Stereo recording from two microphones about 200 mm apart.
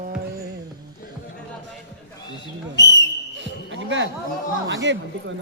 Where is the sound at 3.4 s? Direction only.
65° right (ahead or behind).